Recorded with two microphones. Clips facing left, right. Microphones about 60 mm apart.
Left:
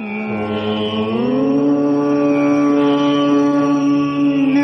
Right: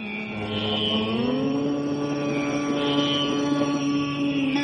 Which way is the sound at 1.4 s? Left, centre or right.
Left.